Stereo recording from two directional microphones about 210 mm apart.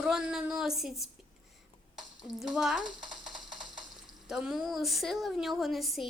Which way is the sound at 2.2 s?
Centre (ahead or behind).